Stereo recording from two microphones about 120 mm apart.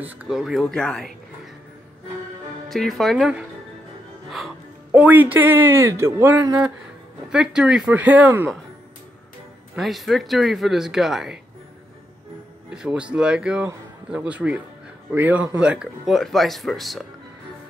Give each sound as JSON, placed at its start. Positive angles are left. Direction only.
{"t": 0.0, "sound": "speech", "side_deg": -10}
{"t": 2.7, "sound": "speech", "side_deg": 0}
{"t": 4.9, "sound": "a man's voice", "side_deg": -15}
{"t": 6.4, "sound": "speech", "side_deg": -35}
{"t": 7.2, "sound": "a man's voice", "side_deg": -5}
{"t": 9.8, "sound": "speech", "side_deg": 0}
{"t": 12.6, "sound": "a man's voice", "side_deg": -10}
{"t": 16.1, "sound": "speech", "side_deg": 0}